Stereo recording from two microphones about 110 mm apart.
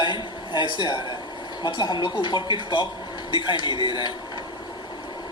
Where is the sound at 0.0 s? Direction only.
45° left (ahead or behind).